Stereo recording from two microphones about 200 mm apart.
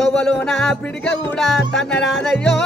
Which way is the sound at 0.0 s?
5° left (ahead or behind).